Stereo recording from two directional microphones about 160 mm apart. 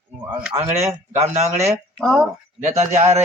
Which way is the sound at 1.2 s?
45° right (ahead or behind).